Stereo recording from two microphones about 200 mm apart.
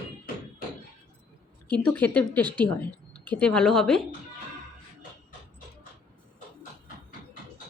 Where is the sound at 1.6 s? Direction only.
5° left (ahead or behind).